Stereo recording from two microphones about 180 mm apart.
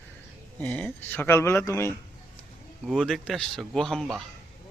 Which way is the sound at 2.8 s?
Centre (ahead or behind).